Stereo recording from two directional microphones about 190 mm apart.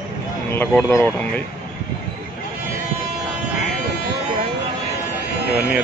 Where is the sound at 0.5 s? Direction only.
10° left (ahead or behind).